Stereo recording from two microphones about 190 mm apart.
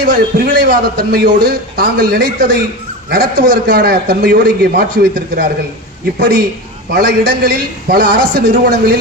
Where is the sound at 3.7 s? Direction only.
55° right (ahead or behind).